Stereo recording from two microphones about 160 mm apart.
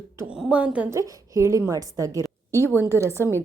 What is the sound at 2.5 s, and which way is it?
Speech, 15° left (ahead or behind).